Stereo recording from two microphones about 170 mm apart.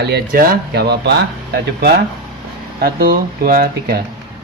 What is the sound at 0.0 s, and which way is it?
Speech, 65° right (ahead or behind).